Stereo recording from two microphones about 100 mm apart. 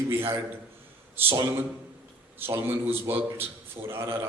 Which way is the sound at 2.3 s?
20° right (ahead or behind).